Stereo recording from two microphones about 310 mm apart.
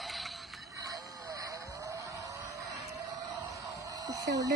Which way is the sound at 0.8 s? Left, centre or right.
Centre.